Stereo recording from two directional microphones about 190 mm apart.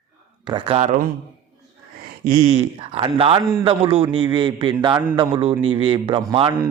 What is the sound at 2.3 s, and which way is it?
Speech, 35° right (ahead or behind).